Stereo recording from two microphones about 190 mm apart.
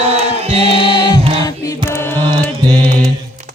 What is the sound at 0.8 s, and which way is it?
Music, 25° left (ahead or behind).